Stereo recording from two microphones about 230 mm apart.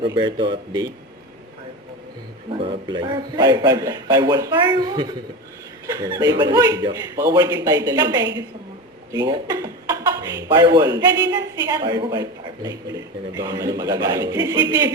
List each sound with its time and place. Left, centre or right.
0.0 s a man's voice: right
2.5 s a man's voice: right